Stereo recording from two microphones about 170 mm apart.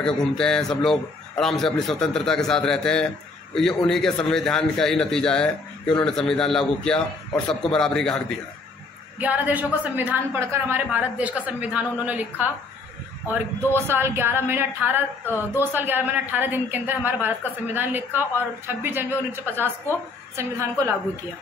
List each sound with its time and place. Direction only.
0.0 s a man's voice: 5° left (ahead or behind)
9.2 s speech: 10° right (ahead or behind)